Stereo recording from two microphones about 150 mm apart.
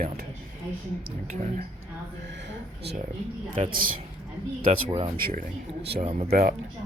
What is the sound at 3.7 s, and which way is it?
Speech, 70° right (ahead or behind).